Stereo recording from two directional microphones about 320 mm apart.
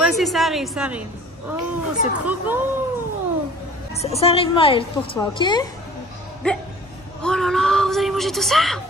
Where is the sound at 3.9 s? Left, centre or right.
Centre.